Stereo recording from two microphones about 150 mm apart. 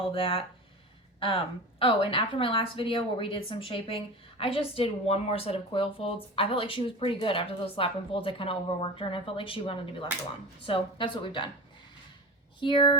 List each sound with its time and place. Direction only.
0.0 s a woman's voice: 40° left (ahead or behind)
1.8 s a woman's voice: 35° left (ahead or behind)
12.5 s speech: 30° left (ahead or behind)